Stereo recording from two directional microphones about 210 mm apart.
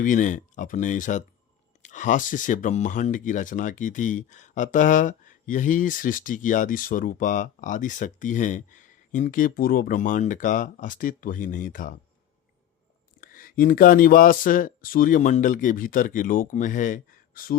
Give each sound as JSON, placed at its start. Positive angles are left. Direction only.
{"t": 0.0, "sound": "speech", "side_deg": 40}
{"t": 13.1, "sound": "speech", "side_deg": 40}